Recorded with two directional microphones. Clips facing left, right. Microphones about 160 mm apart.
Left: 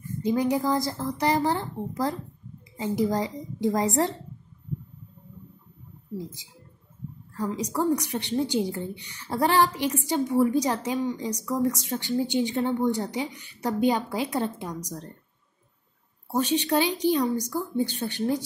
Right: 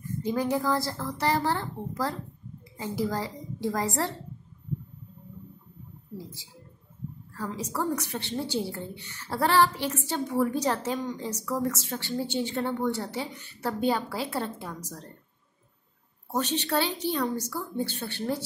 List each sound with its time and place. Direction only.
0.2 s a woman's voice: 15° left (ahead or behind)
7.3 s a woman's voice: 15° left (ahead or behind)
16.3 s a woman's voice: 10° left (ahead or behind)